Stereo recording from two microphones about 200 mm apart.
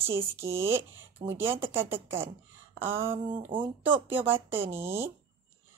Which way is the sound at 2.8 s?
10° right (ahead or behind).